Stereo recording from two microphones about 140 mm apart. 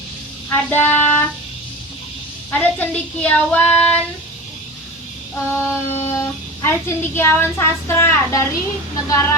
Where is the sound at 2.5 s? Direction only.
10° left (ahead or behind).